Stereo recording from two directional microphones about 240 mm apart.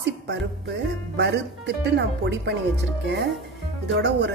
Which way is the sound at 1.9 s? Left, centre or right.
Right.